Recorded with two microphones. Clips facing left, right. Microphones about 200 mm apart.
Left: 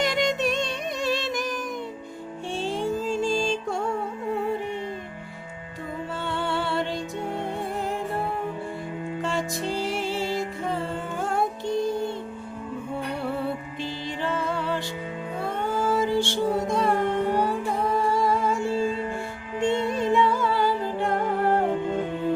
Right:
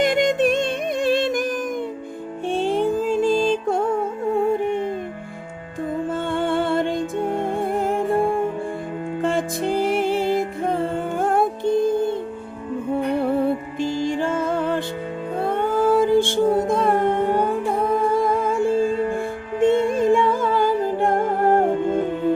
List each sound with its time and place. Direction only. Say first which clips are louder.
0.0 s music: right 6 dB; 50° right (ahead or behind)
6.3 s music: right 6 dB; 50° right (ahead or behind)
13.7 s music: right 9 dB; 45° right (ahead or behind)